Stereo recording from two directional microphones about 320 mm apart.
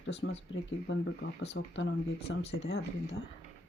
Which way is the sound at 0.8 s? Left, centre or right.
Left.